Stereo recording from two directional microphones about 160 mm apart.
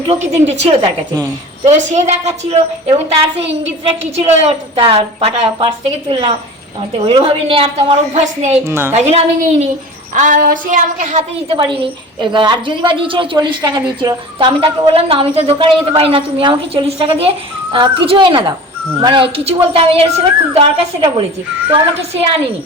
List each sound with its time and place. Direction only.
0.1 s child singing: 45° right (ahead or behind)
0.6 s a woman's voice: 40° right (ahead or behind)
1.6 s child singing: 45° right (ahead or behind)
4.3 s a woman's voice: 40° right (ahead or behind)
5.5 s a woman's voice: 30° right (ahead or behind); by 8.5 s 45° right (ahead or behind)
8.6 s a woman's voice: 15° right (ahead or behind)
8.9 s child singing: 45° right (ahead or behind)
10.2 s child singing: 55° right (ahead or behind)
11.4 s a woman's voice: 30° right (ahead or behind)